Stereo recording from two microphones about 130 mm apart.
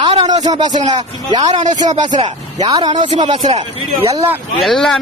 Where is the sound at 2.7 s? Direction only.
35° right (ahead or behind).